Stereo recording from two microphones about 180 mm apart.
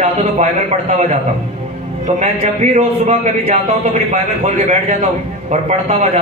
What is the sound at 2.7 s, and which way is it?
A man's voice, 40° right (ahead or behind).